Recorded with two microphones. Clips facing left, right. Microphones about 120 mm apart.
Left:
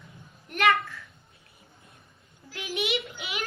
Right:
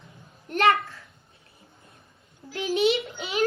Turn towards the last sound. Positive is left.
turn(degrees=-30)  # may be behind; listen again after turning